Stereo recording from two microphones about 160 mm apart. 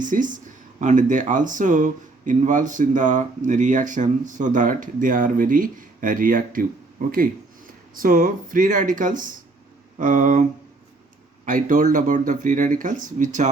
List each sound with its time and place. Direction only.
0.0 s speech: 55° right (ahead or behind)
7.9 s speech: 60° right (ahead or behind)
11.4 s speech: 55° right (ahead or behind)